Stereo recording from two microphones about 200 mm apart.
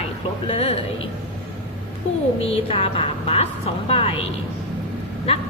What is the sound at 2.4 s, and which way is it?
A man's voice, 30° left (ahead or behind).